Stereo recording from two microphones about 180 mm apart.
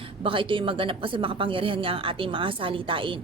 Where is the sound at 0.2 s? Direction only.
30° right (ahead or behind).